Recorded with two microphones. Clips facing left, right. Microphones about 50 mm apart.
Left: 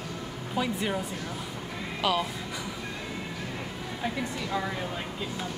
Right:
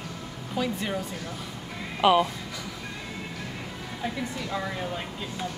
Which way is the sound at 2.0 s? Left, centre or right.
Right.